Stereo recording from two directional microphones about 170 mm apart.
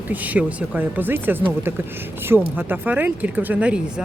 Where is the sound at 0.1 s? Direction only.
10° right (ahead or behind).